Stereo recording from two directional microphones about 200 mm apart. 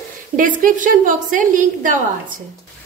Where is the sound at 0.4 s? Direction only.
40° right (ahead or behind).